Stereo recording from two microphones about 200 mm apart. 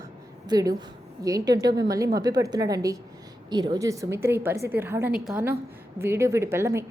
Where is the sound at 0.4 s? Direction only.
20° right (ahead or behind).